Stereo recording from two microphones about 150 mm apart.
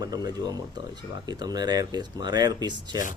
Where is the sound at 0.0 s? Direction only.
25° right (ahead or behind).